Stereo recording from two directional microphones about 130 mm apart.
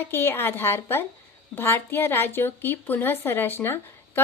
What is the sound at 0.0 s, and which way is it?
A woman's voice, 15° left (ahead or behind).